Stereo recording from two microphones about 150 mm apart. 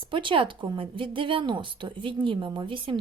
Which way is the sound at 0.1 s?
35° right (ahead or behind).